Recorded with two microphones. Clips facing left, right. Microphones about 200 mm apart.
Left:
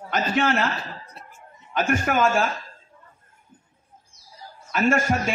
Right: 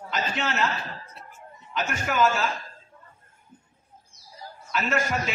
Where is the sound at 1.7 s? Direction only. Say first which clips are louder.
Left 6 dB; 50° left (ahead or behind).